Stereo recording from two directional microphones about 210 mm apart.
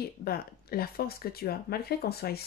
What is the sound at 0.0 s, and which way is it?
Speech, 45° left (ahead or behind).